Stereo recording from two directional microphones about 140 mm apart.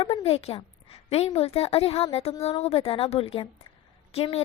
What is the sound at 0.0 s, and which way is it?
A woman's voice, 40° left (ahead or behind).